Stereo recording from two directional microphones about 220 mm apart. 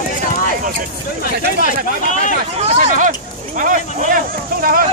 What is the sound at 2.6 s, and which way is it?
Speech, 35° right (ahead or behind).